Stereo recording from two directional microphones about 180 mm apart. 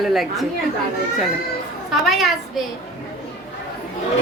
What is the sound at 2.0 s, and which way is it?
Speech, centre (ahead or behind).